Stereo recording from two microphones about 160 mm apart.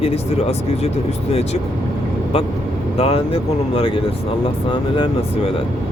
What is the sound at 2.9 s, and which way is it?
Speech, 40° left (ahead or behind).